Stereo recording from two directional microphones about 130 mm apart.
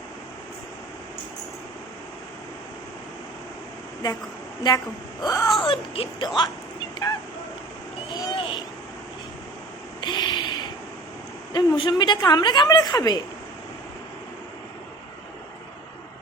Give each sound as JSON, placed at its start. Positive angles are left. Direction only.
{"t": 5.2, "sound": "speech", "side_deg": 30}
{"t": 5.6, "sound": "speech", "side_deg": 45}
{"t": 8.1, "sound": "vehicle", "side_deg": 35}
{"t": 10.0, "sound": "a sound", "side_deg": 35}
{"t": 11.5, "sound": "a woman's voice", "side_deg": 35}